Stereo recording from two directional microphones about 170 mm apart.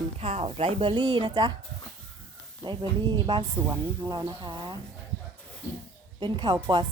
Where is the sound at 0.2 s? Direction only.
35° right (ahead or behind).